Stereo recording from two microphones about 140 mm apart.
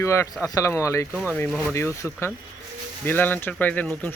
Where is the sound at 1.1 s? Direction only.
15° right (ahead or behind).